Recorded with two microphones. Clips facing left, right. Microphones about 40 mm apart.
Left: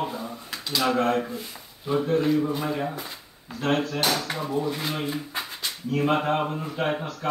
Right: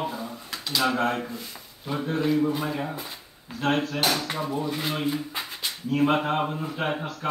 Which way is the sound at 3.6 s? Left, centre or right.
Right.